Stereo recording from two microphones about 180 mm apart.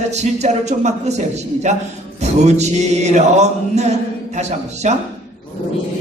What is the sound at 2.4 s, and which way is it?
Music, 40° right (ahead or behind).